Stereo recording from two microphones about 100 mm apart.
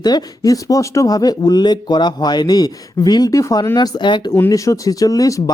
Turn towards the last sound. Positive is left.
turn(degrees=35)  # may be behind; listen again after turning